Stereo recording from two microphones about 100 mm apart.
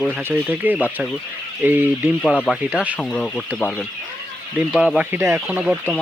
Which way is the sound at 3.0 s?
10° left (ahead or behind).